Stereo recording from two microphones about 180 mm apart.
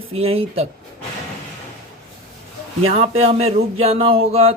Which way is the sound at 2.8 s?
35° right (ahead or behind).